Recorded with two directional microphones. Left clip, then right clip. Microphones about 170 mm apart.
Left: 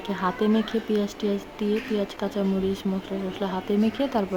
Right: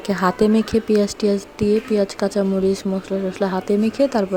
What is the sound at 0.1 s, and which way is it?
Speech, 35° right (ahead or behind).